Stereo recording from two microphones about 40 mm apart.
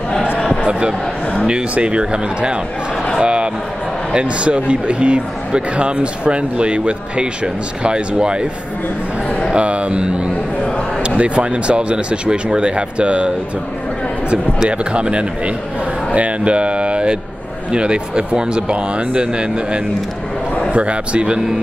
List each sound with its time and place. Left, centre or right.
0.6 s a sound: right
1.5 s speech: right
9.5 s speech: right
14.7 s speech: right